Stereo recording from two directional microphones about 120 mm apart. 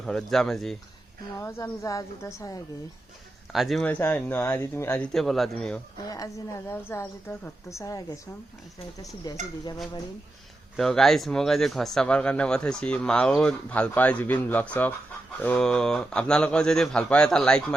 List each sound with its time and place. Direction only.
0.0 s speech: 5° left (ahead or behind)
1.4 s a woman's voice: 25° left (ahead or behind)
3.5 s speech: centre (ahead or behind)
3.8 s speech: 15° left (ahead or behind)
5.1 s speech: centre (ahead or behind)
6.1 s a woman's voice: 30° left (ahead or behind)
10.8 s speech: 5° left (ahead or behind)